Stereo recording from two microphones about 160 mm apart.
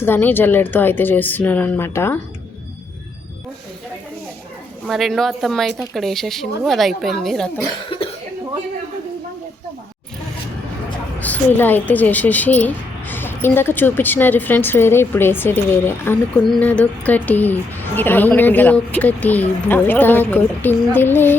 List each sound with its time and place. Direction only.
0.0 s a woman's voice: 10° left (ahead or behind)
4.9 s speech: centre (ahead or behind)
7.9 s cough: 35° left (ahead or behind)
11.2 s a woman's voice: 10° left (ahead or behind)